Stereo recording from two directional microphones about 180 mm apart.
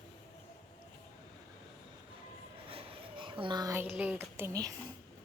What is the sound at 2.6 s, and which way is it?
A woman's voice, 30° right (ahead or behind).